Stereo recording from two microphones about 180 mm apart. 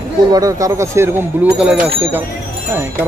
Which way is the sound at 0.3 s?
20° right (ahead or behind).